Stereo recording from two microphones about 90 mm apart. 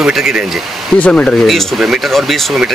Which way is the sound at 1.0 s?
10° left (ahead or behind).